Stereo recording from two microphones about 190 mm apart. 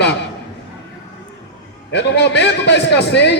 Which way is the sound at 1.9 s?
65° left (ahead or behind).